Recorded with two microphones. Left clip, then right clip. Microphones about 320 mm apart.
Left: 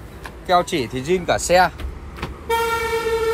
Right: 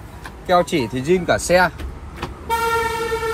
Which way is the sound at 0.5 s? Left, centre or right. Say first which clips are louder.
Right 1 dB; centre.